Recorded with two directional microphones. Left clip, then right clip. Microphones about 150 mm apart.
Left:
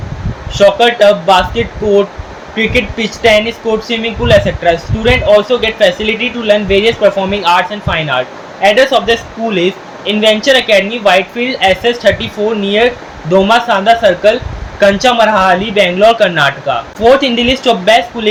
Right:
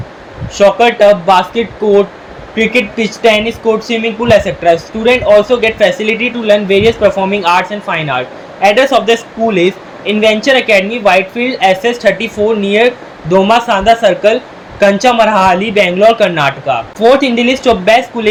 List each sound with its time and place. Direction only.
0.5 s speech: 25° right (ahead or behind)